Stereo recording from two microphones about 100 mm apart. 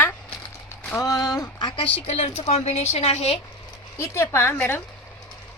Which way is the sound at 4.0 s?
25° left (ahead or behind).